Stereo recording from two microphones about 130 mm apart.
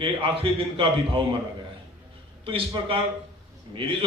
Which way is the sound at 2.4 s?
40° right (ahead or behind).